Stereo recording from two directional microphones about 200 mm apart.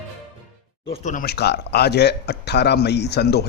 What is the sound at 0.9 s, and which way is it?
Speech, 40° left (ahead or behind).